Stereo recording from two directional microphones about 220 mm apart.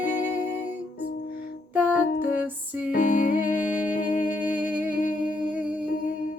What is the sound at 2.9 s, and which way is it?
Music, 35° left (ahead or behind).